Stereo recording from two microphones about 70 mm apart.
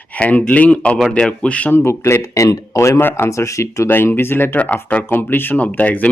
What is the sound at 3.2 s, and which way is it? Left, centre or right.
Speech, left.